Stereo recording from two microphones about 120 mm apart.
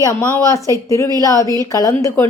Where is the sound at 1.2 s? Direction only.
25° left (ahead or behind).